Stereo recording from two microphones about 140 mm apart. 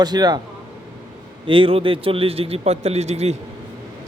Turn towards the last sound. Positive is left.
turn(degrees=-50)  # may be behind; listen again after turning